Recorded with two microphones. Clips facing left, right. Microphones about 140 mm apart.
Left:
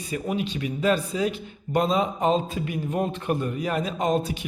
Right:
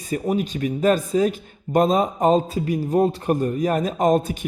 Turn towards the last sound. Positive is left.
turn(degrees=-45)  # may be behind; listen again after turning